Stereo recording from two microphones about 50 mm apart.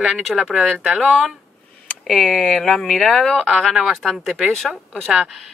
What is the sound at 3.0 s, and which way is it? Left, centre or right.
Speech, centre.